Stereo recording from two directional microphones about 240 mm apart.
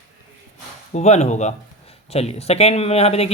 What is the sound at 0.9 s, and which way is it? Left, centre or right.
Speech, left.